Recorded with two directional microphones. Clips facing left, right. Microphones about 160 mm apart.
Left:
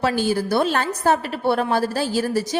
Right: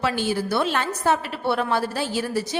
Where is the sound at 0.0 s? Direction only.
40° left (ahead or behind).